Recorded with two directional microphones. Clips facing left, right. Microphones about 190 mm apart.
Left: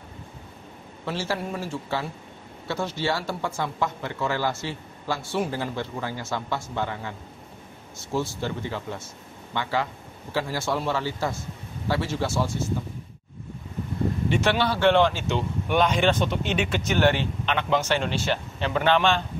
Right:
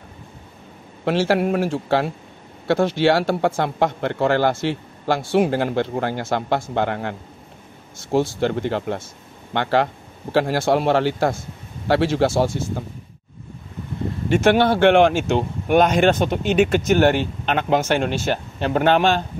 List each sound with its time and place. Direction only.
1.0 s speech: 75° right (ahead or behind)
14.3 s speech: 50° right (ahead or behind)